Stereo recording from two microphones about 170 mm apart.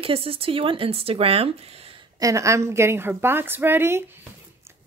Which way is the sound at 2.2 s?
20° right (ahead or behind).